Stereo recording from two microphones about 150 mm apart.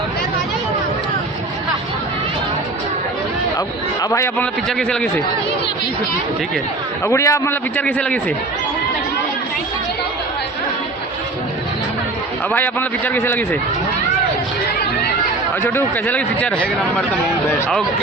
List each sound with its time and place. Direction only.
4.1 s a man's voice: 20° left (ahead or behind)
4.8 s a man's voice: 5° left (ahead or behind)
7.0 s a man's voice: 20° left (ahead or behind)
12.5 s a man's voice: 10° left (ahead or behind)
15.6 s a man's voice: 15° left (ahead or behind)